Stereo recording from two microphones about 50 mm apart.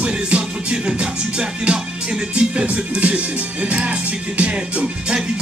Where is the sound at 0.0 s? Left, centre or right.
Right.